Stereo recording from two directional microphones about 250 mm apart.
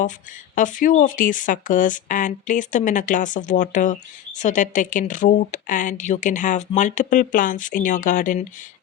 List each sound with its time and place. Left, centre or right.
0.5 s speech: left